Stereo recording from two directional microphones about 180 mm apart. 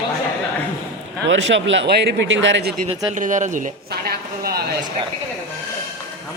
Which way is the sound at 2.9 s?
45° right (ahead or behind).